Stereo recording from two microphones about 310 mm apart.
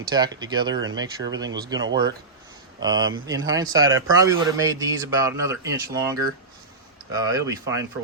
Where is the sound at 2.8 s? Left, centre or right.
Centre.